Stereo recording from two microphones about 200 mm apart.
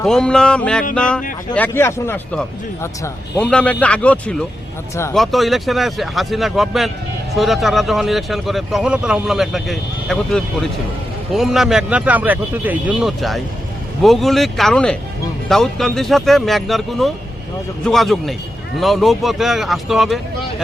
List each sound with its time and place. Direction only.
0.0 s speech: 5° left (ahead or behind)